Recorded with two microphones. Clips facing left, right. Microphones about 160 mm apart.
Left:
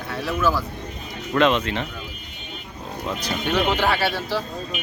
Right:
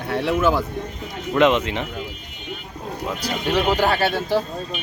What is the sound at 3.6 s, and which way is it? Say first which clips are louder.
Speech: right 2 dB; 40° right (ahead or behind).